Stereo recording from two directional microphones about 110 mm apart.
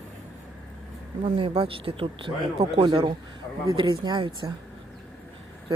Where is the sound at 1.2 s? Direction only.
55° right (ahead or behind).